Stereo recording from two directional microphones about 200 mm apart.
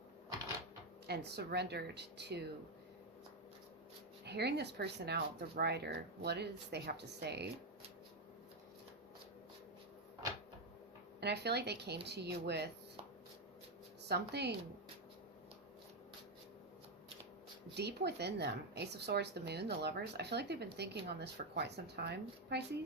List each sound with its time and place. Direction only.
1.0 s a woman's voice: 55° right (ahead or behind)
4.3 s a woman's voice: 55° right (ahead or behind)
11.2 s a woman's voice: 55° right (ahead or behind)
14.1 s a woman's voice: 55° right (ahead or behind)
17.7 s a woman's voice: 55° right (ahead or behind)